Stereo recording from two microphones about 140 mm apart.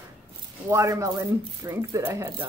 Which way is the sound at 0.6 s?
20° right (ahead or behind).